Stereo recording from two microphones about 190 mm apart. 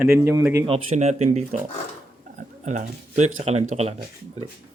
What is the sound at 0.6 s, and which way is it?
Speech, 35° right (ahead or behind).